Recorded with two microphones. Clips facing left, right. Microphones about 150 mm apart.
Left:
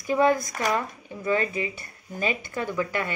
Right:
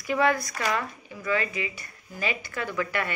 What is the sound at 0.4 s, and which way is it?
Speech, 45° left (ahead or behind).